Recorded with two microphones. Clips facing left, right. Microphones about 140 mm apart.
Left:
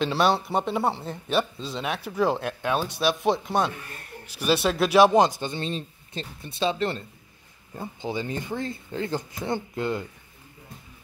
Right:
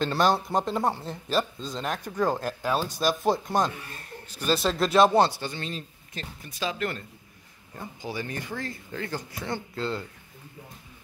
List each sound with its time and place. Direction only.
0.0 s speech: centre (ahead or behind)